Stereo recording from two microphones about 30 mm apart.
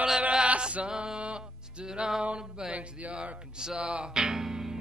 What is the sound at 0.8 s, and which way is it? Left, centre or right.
Music, right.